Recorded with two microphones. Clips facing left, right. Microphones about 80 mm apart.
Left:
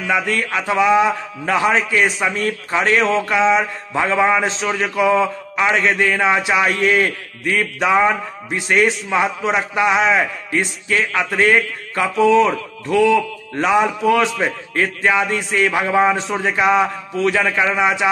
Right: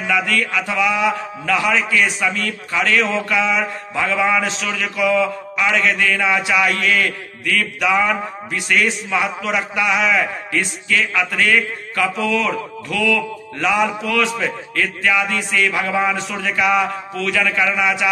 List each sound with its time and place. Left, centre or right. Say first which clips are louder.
0.0 s a man's voice: even; left